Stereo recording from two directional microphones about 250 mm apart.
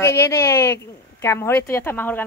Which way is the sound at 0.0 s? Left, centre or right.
Centre.